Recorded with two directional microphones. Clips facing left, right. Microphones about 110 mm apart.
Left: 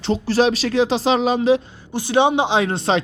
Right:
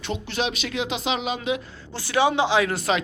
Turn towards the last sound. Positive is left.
turn(degrees=30)  # may be behind; listen again after turning